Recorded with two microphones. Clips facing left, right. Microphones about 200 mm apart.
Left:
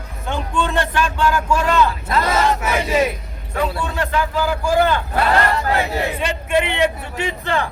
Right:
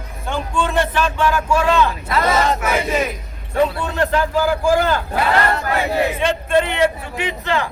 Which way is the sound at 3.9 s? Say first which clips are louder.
Right 5 dB; 45° right (ahead or behind).